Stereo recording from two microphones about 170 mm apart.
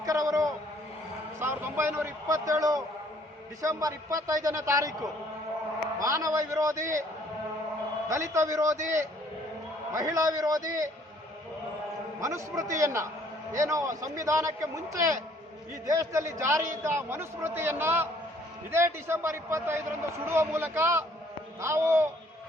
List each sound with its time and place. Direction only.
0.0 s a sound: 20° right (ahead or behind)
1.4 s a man's voice: 15° right (ahead or behind)
6.0 s a man's voice: 20° right (ahead or behind)
8.0 s a man's voice: 20° right (ahead or behind)
9.9 s a man's voice: 20° right (ahead or behind)
12.2 s a man's voice: 20° right (ahead or behind)